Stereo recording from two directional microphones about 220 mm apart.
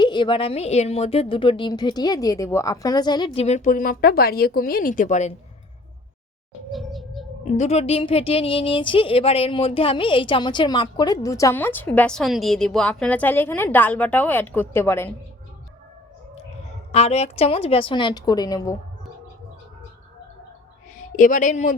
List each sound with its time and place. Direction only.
0.0 s a woman's voice: 20° left (ahead or behind)
6.7 s a sound: centre (ahead or behind)
7.5 s speech: 30° left (ahead or behind); by 15.1 s 10° left (ahead or behind)
16.9 s a woman's voice: 30° left (ahead or behind)
21.2 s speech: 35° left (ahead or behind)